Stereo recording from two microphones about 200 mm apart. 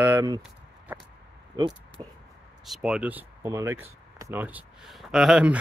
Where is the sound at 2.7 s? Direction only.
5° right (ahead or behind).